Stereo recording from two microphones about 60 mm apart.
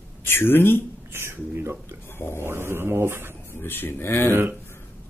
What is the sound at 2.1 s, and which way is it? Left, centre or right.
Speech, left.